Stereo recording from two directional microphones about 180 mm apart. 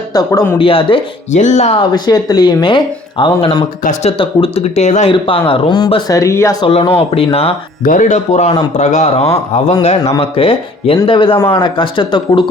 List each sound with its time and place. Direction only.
0.1 s speech: 20° left (ahead or behind)
0.6 s speech: 30° left (ahead or behind)
1.4 s speech: 40° left (ahead or behind)
2.0 s speech: 20° left (ahead or behind); by 5.1 s 40° left (ahead or behind)
5.1 s speech: 30° left (ahead or behind)
6.7 s speech: 30° left (ahead or behind)
7.9 s speech: 45° left (ahead or behind); by 12.5 s 25° left (ahead or behind)